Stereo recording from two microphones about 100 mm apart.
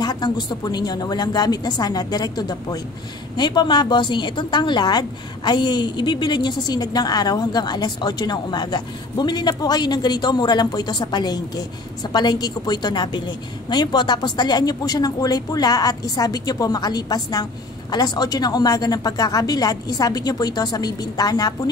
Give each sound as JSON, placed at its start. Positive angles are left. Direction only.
{"t": 0.0, "sound": "a woman's voice", "side_deg": 45}